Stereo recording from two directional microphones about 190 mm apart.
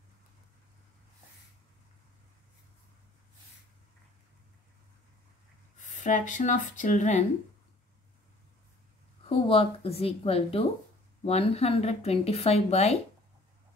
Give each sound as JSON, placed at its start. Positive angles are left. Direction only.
{"t": 5.9, "sound": "a woman's voice", "side_deg": 40}
{"t": 9.2, "sound": "a woman's voice", "side_deg": 30}